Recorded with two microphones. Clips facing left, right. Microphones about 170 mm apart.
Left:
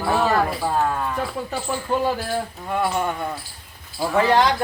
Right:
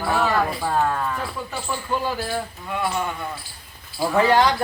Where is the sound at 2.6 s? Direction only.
45° left (ahead or behind).